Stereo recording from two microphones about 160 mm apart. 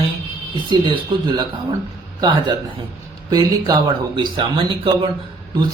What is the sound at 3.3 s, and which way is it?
Speech, 25° right (ahead or behind).